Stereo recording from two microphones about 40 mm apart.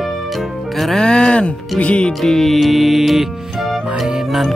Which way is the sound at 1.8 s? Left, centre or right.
Left.